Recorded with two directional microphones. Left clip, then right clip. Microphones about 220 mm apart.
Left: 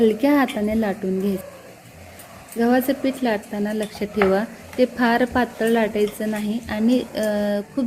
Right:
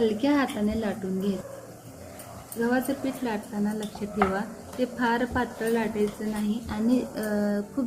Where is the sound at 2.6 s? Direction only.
35° left (ahead or behind).